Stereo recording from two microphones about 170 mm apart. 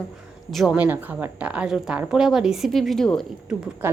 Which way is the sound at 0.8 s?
10° right (ahead or behind).